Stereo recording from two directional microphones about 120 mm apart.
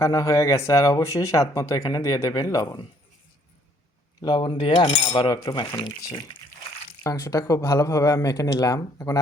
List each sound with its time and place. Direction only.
0.0 s speech: 25° left (ahead or behind)
4.2 s speech: 40° left (ahead or behind)
4.7 s cutlery: 50° left (ahead or behind); by 5.6 s 35° left (ahead or behind)
6.0 s speech: 30° left (ahead or behind)